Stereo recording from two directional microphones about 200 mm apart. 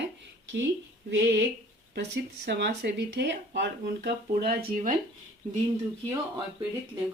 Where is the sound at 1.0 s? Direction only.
60° right (ahead or behind).